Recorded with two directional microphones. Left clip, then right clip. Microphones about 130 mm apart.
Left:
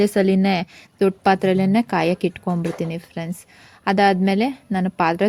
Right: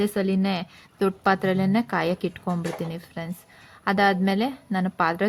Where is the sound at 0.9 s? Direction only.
30° left (ahead or behind).